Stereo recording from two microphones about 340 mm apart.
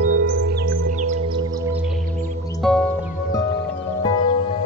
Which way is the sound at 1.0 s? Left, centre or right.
Centre.